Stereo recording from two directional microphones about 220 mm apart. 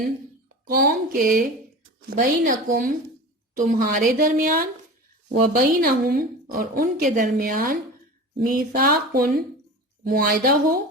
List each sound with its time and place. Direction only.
0.7 s a woman's voice: 40° right (ahead or behind)